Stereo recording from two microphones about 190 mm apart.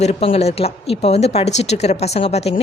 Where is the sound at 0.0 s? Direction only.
35° left (ahead or behind).